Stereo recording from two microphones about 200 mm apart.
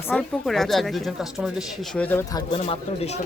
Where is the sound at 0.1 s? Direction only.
Centre (ahead or behind).